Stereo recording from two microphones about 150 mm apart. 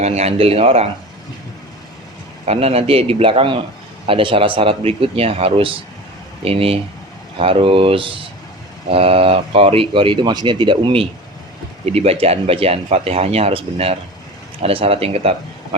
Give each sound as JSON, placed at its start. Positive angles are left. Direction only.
{"t": 0.0, "sound": "speech", "side_deg": -45}
{"t": 2.5, "sound": "speech", "side_deg": -45}